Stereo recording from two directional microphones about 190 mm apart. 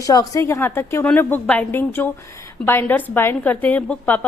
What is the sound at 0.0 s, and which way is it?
A woman's voice, 20° left (ahead or behind).